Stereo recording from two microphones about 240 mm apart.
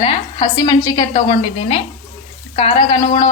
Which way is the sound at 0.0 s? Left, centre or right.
Left.